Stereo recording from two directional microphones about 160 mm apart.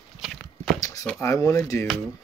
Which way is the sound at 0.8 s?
20° left (ahead or behind).